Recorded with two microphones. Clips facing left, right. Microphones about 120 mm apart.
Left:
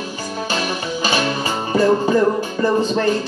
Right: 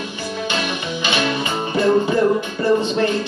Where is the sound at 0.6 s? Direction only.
40° left (ahead or behind).